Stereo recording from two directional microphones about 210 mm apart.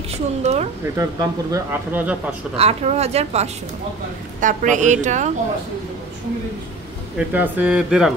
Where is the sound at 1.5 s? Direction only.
10° right (ahead or behind).